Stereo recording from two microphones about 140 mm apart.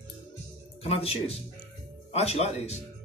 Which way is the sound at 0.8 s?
45° left (ahead or behind).